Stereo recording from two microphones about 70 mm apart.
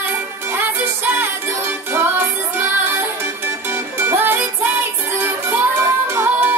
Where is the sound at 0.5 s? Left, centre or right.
Right.